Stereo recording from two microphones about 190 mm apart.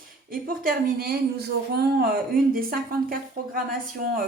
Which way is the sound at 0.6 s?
50° right (ahead or behind).